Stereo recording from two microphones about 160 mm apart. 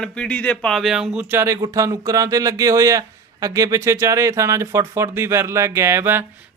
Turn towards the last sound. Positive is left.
turn(degrees=-15)  # may be behind; listen again after turning